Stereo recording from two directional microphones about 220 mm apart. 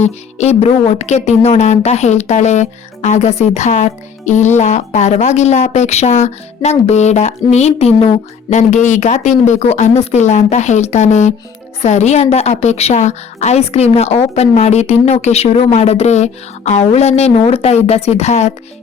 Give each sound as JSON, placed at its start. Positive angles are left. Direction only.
{"t": 0.0, "sound": "a woman's voice", "side_deg": 30}